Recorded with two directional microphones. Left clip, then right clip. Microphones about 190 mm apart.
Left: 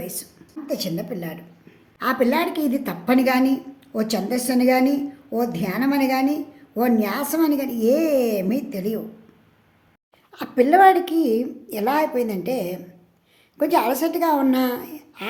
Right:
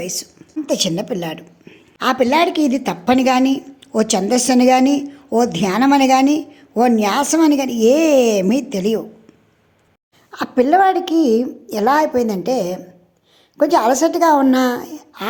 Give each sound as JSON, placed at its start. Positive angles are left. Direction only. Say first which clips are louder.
{"t": 0.0, "sound": "a woman's voice", "louder": "right 9 dB", "side_deg": -25}
{"t": 0.7, "sound": "a woman's voice", "louder": "right 8 dB", "side_deg": -35}
{"t": 10.3, "sound": "a woman's voice", "louder": "right 3 dB", "side_deg": -20}